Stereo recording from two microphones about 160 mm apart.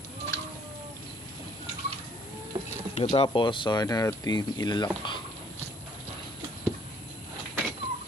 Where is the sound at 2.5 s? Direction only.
35° right (ahead or behind).